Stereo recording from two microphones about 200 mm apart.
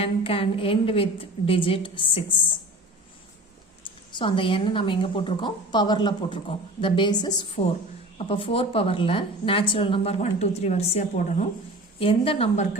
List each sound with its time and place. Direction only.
0.0 s a woman's voice: 30° left (ahead or behind)
3.8 s a woman's voice: 25° left (ahead or behind)